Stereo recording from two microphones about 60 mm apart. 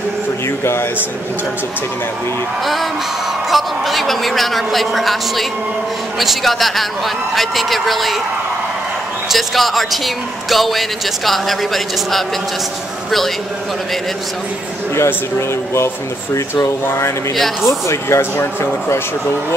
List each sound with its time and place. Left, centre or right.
2.6 s a man's voice: centre
9.3 s a man's voice: centre
16.8 s speech: left
17.6 s speech: left